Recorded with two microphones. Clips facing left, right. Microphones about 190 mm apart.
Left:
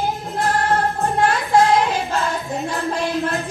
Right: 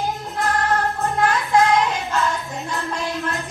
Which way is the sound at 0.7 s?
30° left (ahead or behind).